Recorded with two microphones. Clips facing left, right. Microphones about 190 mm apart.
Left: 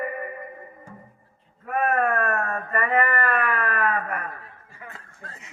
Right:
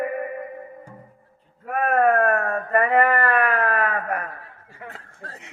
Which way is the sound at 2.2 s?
60° right (ahead or behind).